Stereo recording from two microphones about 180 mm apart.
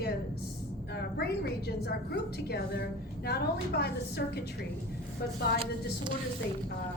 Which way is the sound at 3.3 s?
65° left (ahead or behind).